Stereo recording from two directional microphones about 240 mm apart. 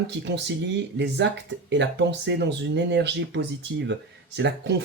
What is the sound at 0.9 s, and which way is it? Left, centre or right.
Speech, right.